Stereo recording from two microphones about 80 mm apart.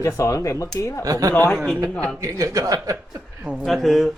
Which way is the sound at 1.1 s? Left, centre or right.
Right.